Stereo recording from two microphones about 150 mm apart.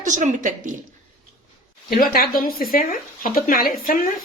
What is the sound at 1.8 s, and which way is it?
Speech, 80° left.